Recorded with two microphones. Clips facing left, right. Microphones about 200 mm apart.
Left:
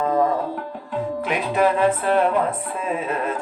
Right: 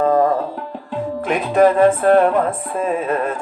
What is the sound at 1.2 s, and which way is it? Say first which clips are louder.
Speech: right 7 dB; 45° right (ahead or behind).